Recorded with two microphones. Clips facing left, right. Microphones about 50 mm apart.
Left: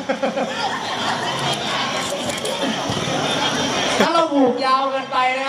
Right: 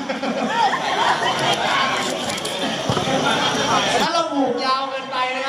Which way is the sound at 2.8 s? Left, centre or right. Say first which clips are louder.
Right 2 dB; right.